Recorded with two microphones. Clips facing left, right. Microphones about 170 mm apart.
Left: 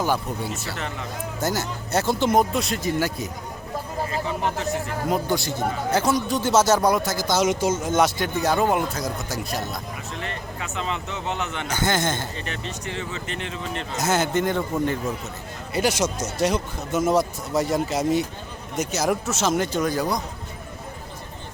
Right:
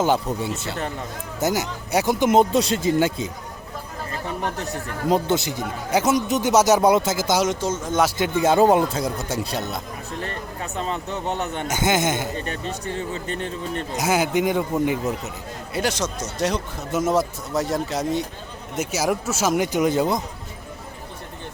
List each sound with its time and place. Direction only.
0.0 s speech: 25° right (ahead or behind)
2.4 s speech: 30° right (ahead or behind)
4.7 s speech: 30° right (ahead or behind)
7.4 s speech: 5° left (ahead or behind)
8.4 s speech: 30° right (ahead or behind)
10.2 s music: 45° right (ahead or behind)
11.4 s speech: 40° right (ahead or behind)
11.9 s speech: 20° right (ahead or behind)
12.5 s speech: 45° right (ahead or behind)
13.9 s speech: 10° right (ahead or behind)
15.7 s speech: 5° left (ahead or behind); by 19.9 s 15° right (ahead or behind)
19.9 s speech: 25° right (ahead or behind)